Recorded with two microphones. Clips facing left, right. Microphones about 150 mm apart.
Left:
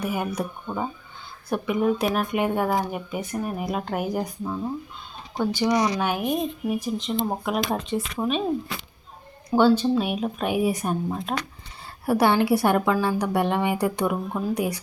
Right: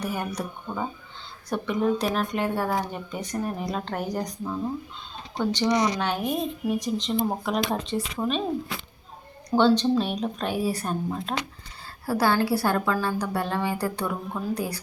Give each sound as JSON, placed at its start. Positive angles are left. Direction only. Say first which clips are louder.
{"t": 0.0, "sound": "speech", "louder": "left 3 dB", "side_deg": 10}
{"t": 9.5, "sound": "a woman's voice", "louder": "left 1 dB", "side_deg": 5}